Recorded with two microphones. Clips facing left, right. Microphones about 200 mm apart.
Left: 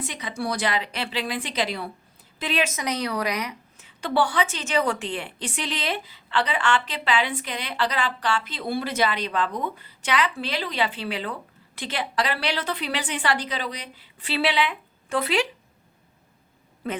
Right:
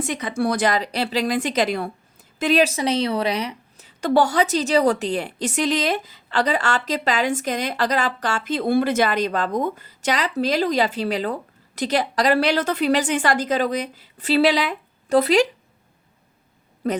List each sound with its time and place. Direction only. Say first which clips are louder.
0.0 s a woman's voice: right 7 dB; 50° right (ahead or behind)
16.8 s speech: right 7 dB; 40° right (ahead or behind)